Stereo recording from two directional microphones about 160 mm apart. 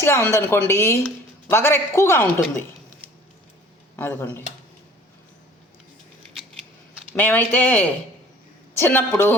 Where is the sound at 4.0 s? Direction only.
10° left (ahead or behind).